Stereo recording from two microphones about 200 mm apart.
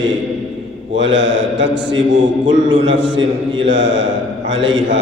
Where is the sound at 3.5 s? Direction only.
65° right (ahead or behind).